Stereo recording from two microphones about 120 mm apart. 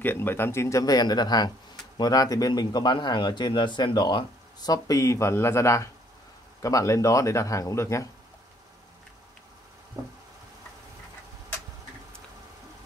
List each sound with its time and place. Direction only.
0.0 s speech: 15° left (ahead or behind)